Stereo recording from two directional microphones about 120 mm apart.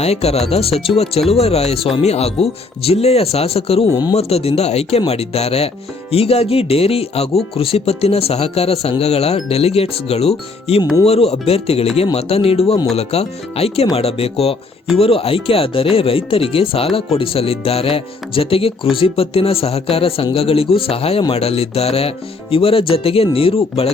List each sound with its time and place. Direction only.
0.0 s speech: 60° left (ahead or behind)